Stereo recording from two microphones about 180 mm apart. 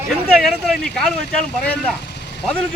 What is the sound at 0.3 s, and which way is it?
Speech, centre (ahead or behind).